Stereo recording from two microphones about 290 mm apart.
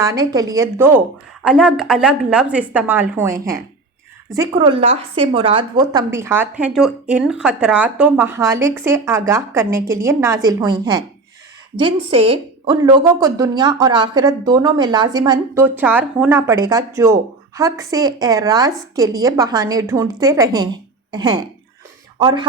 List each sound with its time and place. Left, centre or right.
0.0 s speech: centre